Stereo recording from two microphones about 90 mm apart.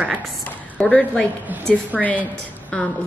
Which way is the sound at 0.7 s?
15° left (ahead or behind).